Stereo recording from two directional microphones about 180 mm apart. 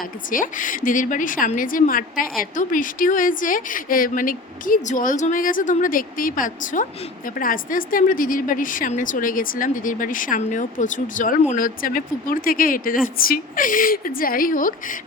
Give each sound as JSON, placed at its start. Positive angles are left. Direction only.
{"t": 0.0, "sound": "a woman's voice", "side_deg": 50}